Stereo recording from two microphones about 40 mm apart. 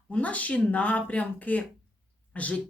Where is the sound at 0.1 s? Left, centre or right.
Left.